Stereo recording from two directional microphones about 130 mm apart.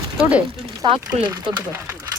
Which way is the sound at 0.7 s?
35° right (ahead or behind).